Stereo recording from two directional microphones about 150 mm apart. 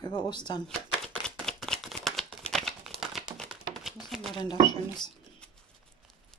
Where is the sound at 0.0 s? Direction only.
30° left (ahead or behind).